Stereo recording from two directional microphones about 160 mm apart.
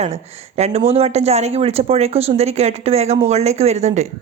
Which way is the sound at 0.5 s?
40° right (ahead or behind).